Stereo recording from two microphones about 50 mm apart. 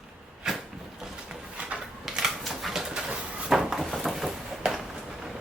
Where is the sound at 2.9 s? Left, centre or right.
Centre.